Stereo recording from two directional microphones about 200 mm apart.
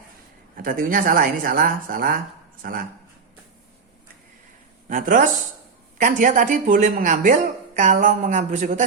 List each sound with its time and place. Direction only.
0.5 s a woman's voice: 45° right (ahead or behind)
4.9 s a man's voice: 40° right (ahead or behind)